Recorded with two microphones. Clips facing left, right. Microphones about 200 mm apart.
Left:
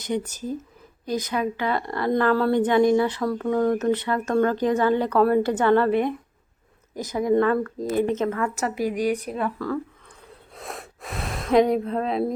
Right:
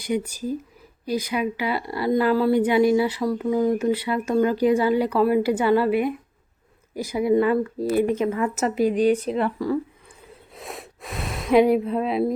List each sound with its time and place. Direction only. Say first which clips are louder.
0.0 s speech: right 2 dB; 10° right (ahead or behind)
10.5 s gasp: even; centre (ahead or behind)